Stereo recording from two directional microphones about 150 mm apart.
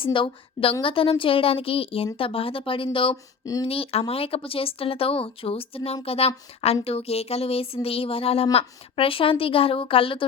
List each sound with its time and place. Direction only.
0.0 s speech: 35° left (ahead or behind)
3.4 s speech: 25° left (ahead or behind)
3.7 s speech: 40° left (ahead or behind)